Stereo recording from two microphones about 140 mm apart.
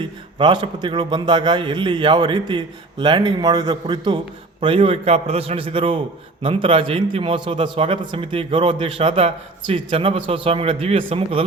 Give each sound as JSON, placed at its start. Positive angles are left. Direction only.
{"t": 0.0, "sound": "a man's voice", "side_deg": -35}
{"t": 4.6, "sound": "a man's voice", "side_deg": -45}